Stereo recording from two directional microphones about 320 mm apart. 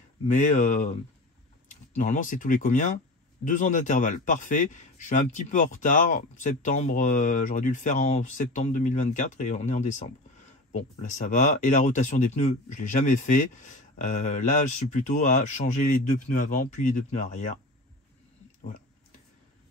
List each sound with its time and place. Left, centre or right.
0.3 s speech: left
18.6 s oink: left